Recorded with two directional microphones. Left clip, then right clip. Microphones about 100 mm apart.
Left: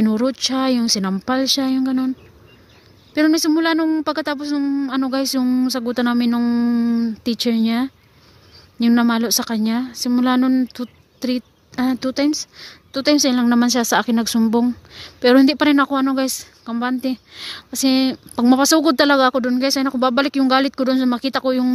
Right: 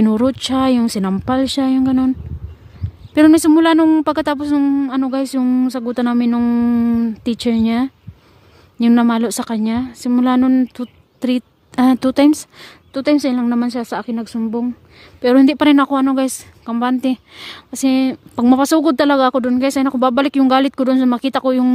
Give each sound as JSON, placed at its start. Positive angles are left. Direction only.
{"t": 0.0, "sound": "speech", "side_deg": -45}
{"t": 3.2, "sound": "a woman's voice", "side_deg": -55}
{"t": 4.8, "sound": "speech", "side_deg": -30}
{"t": 12.0, "sound": "speech", "side_deg": -70}
{"t": 12.9, "sound": "a woman's voice", "side_deg": -30}
{"t": 15.4, "sound": "speech", "side_deg": -35}
{"t": 17.8, "sound": "speech", "side_deg": -25}